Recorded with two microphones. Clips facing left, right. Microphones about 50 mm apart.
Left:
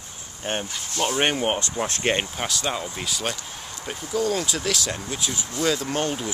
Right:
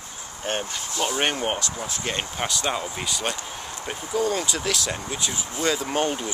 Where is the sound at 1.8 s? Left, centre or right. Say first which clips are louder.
Left 6 dB; left.